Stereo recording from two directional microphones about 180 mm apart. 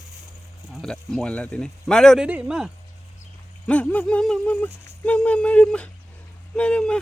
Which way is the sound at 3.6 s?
5° left (ahead or behind).